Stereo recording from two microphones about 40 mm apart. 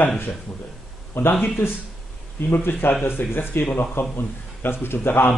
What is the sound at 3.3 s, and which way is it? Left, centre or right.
A man's voice, left.